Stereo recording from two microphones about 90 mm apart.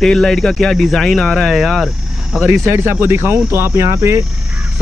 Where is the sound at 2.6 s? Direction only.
25° right (ahead or behind).